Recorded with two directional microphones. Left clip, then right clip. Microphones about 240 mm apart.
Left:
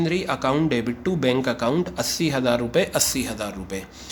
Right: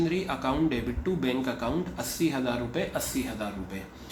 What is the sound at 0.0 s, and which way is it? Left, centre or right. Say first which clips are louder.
Speech: left 5 dB; left.